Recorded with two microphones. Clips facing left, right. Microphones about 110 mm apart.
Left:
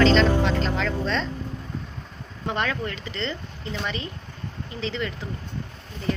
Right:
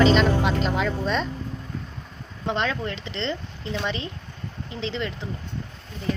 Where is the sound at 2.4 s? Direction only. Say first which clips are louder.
Right 1 dB; 20° right (ahead or behind).